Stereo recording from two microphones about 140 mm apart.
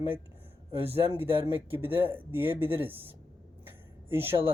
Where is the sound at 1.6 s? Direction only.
15° right (ahead or behind).